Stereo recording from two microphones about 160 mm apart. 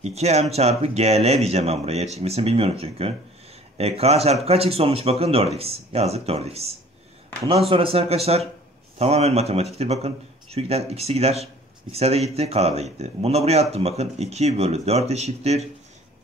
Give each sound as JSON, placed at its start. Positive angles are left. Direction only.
{"t": 0.0, "sound": "speech", "side_deg": -40}
{"t": 7.7, "sound": "speech", "side_deg": -35}